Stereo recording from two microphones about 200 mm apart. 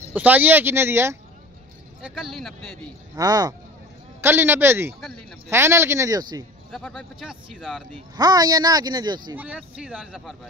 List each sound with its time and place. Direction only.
0.1 s speech: 10° right (ahead or behind)
3.2 s speech: 20° right (ahead or behind)
6.7 s speech: 5° left (ahead or behind)
8.2 s speech: 20° right (ahead or behind)
9.4 s speech: 5° right (ahead or behind)